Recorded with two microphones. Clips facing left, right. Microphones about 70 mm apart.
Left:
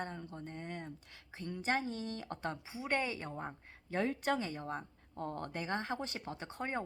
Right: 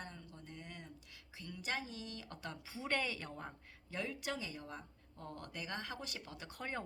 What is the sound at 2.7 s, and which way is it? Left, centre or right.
Speech, left.